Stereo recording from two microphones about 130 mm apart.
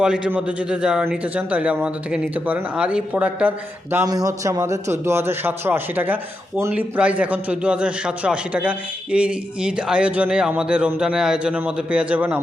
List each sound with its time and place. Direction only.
0.0 s speech: 10° right (ahead or behind)
4.0 s a man's voice: 30° right (ahead or behind); by 12.4 s 10° right (ahead or behind)